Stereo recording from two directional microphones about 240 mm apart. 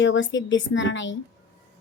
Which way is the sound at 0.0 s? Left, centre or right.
Left.